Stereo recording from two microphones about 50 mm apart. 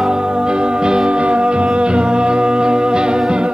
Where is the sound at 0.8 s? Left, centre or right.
Centre.